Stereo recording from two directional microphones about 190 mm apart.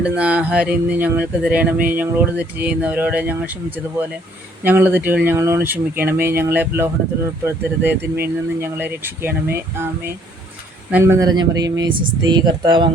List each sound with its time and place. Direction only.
0.0 s speech: 5° right (ahead or behind); by 12.9 s 25° right (ahead or behind)